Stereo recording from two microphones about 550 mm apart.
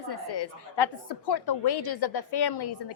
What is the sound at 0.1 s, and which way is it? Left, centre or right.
A woman's voice, left.